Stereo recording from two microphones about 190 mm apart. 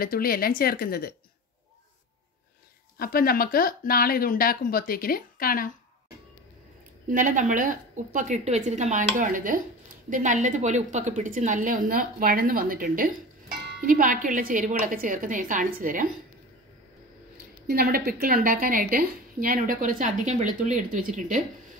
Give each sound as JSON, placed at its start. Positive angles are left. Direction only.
{"t": 0.0, "sound": "speech", "side_deg": 50}
{"t": 3.0, "sound": "speech", "side_deg": 50}
{"t": 7.1, "sound": "a woman's voice", "side_deg": -45}
{"t": 17.6, "sound": "a woman's voice", "side_deg": -55}